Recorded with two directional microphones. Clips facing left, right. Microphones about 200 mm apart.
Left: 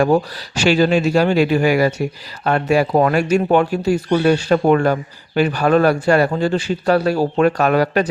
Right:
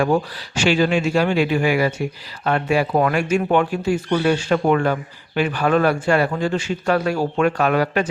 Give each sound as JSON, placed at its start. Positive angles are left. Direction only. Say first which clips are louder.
{"t": 0.0, "sound": "speech", "louder": "left 3 dB", "side_deg": 40}